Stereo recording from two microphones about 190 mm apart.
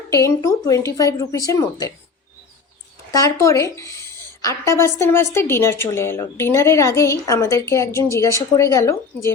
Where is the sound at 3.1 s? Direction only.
15° left (ahead or behind).